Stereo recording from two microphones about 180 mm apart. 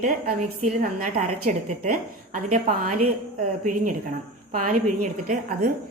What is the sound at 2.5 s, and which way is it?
A woman's voice, 45° right (ahead or behind).